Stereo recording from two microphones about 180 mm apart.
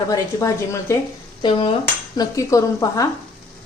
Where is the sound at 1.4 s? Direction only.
30° left (ahead or behind).